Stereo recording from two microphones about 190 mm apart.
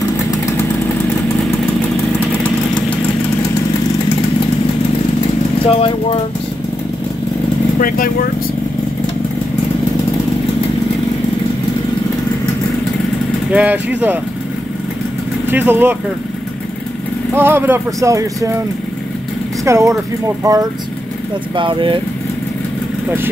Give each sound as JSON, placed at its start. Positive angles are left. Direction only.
{"t": 5.8, "sound": "speech", "side_deg": 30}
{"t": 7.8, "sound": "speech", "side_deg": 50}
{"t": 13.5, "sound": "speech", "side_deg": -5}
{"t": 15.5, "sound": "speech", "side_deg": -10}
{"t": 17.3, "sound": "speech", "side_deg": -10}
{"t": 19.6, "sound": "speech", "side_deg": -15}